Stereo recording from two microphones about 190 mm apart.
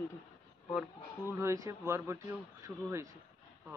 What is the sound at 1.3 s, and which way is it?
Speech, 15° right (ahead or behind).